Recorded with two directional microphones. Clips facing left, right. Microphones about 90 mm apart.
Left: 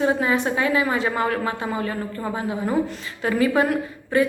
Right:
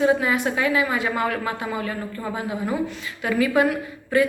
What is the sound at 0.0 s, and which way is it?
A woman's voice, 30° left (ahead or behind).